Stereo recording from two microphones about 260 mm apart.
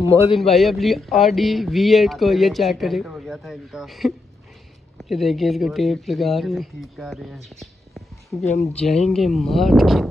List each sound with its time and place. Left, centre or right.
0.6 s speech: centre